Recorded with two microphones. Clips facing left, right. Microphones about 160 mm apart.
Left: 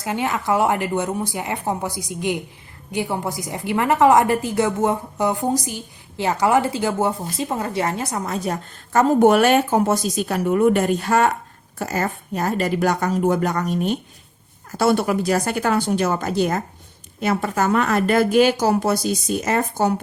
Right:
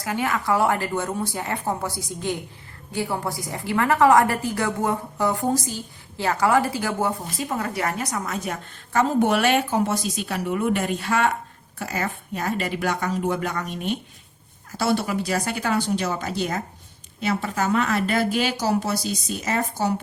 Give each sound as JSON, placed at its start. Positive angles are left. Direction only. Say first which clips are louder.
{"t": 0.0, "sound": "a woman's voice", "louder": "left 2 dB", "side_deg": 20}